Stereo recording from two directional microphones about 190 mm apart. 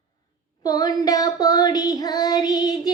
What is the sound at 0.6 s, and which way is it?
Child singing, 20° left (ahead or behind).